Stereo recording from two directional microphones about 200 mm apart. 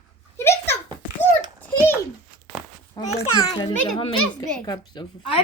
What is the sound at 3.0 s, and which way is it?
A child's voice, 35° left (ahead or behind).